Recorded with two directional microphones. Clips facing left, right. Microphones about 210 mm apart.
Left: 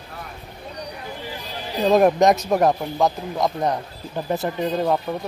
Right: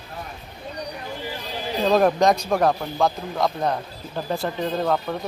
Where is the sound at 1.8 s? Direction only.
15° left (ahead or behind).